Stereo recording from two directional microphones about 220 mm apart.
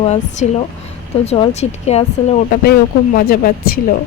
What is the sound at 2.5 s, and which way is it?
Speech, 40° left (ahead or behind).